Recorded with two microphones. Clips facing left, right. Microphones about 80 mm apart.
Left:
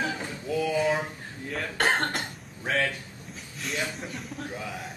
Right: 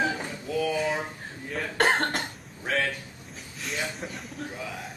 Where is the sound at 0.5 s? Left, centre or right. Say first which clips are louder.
Left 2 dB; centre.